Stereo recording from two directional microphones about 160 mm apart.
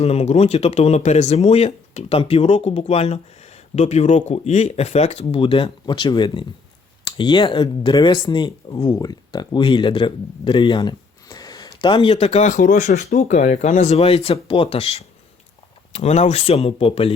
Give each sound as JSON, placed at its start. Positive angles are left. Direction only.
{"t": 0.0, "sound": "speech", "side_deg": 40}